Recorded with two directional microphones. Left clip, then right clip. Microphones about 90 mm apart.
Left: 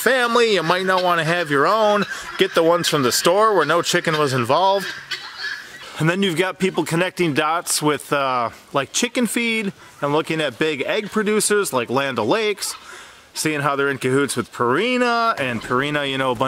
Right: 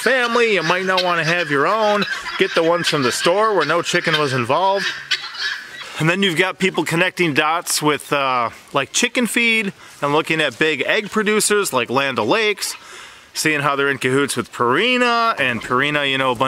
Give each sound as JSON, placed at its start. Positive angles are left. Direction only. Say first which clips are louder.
{"t": 0.0, "sound": "speech", "louder": "even", "side_deg": 15}
{"t": 5.1, "sound": "fowl", "louder": "right 9 dB", "side_deg": -20}
{"t": 5.9, "sound": "speech", "louder": "right 3 dB", "side_deg": -5}